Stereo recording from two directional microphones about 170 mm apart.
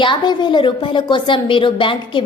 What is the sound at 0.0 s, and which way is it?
A woman's voice, 25° left (ahead or behind).